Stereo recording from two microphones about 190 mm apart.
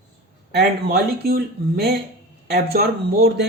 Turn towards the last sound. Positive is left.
turn(degrees=-60)  # may be behind; listen again after turning